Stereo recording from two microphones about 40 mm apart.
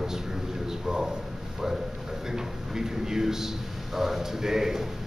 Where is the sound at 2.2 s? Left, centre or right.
Centre.